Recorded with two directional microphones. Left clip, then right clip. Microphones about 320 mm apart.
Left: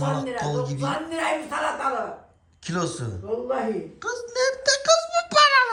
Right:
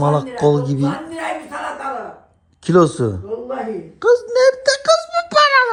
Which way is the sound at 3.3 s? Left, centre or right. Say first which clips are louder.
Right 2 dB; centre.